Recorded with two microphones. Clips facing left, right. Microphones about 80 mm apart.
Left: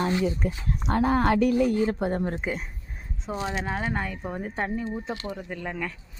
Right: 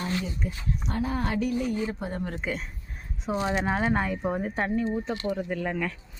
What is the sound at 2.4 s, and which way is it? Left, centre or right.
Speech, centre.